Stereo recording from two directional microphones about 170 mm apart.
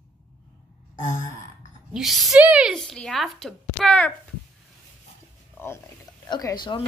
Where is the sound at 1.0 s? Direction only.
50° left (ahead or behind).